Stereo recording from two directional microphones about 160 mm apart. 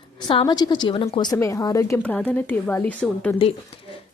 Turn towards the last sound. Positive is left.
turn(degrees=35)  # may be behind; listen again after turning